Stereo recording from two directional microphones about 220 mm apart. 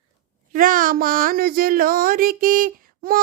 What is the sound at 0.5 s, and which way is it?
Speech, 40° right (ahead or behind).